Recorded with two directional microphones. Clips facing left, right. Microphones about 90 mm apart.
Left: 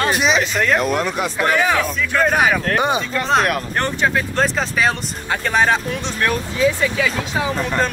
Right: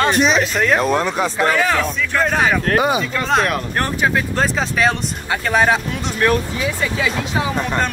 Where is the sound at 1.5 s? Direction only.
10° left (ahead or behind).